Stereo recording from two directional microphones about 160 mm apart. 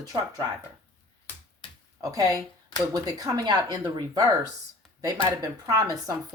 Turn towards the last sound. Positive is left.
turn(degrees=-20)  # may be behind; listen again after turning